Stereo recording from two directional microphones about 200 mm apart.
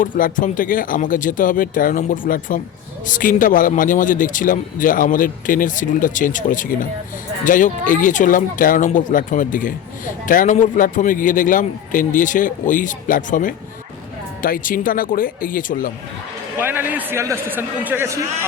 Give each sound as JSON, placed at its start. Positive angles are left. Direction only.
{"t": 0.0, "sound": "a man's voice", "side_deg": 45}
{"t": 16.6, "sound": "a man's voice", "side_deg": -10}